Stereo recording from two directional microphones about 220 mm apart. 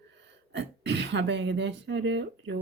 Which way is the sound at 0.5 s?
50° right (ahead or behind).